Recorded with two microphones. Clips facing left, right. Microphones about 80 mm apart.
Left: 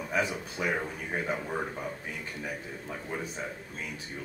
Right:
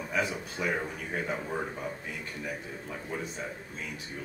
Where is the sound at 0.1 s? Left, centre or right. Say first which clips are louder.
Left 1 dB; centre.